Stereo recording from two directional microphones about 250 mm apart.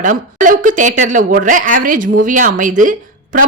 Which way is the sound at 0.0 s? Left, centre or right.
Right.